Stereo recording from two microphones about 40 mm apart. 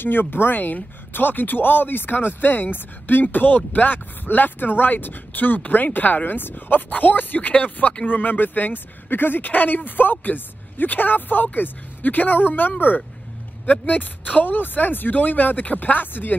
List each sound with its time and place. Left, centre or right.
0.0 s speech: left